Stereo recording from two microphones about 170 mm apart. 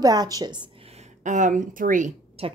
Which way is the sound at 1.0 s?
45° right (ahead or behind).